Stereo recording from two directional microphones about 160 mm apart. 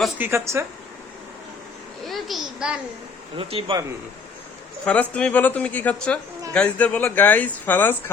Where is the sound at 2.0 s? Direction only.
Centre (ahead or behind).